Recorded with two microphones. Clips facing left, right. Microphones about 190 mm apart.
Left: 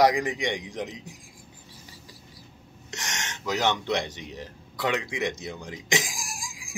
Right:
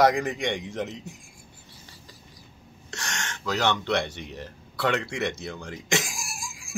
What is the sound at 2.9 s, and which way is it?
Speech, 20° left (ahead or behind).